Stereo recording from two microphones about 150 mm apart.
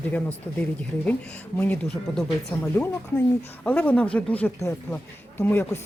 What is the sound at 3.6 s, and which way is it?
Speech, 10° left (ahead or behind).